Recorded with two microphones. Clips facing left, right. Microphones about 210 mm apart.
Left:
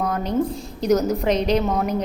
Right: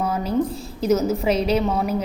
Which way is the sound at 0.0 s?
5° right (ahead or behind).